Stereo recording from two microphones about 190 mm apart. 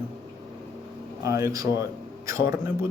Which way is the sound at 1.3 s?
15° right (ahead or behind).